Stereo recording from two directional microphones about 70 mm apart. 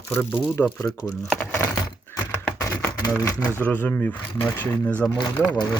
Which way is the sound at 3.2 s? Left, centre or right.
Left.